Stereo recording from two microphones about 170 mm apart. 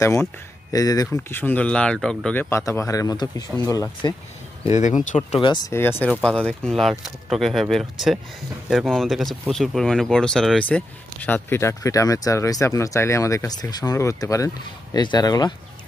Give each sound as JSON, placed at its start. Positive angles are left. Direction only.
{"t": 0.7, "sound": "speech", "side_deg": 20}
{"t": 2.5, "sound": "speech", "side_deg": 15}
{"t": 4.7, "sound": "speech", "side_deg": 45}
{"t": 5.7, "sound": "speech", "side_deg": 15}